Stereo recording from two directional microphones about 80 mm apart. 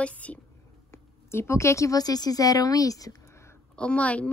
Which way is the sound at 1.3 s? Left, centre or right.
Left.